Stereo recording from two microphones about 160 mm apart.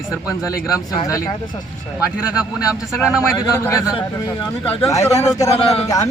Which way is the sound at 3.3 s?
20° left (ahead or behind).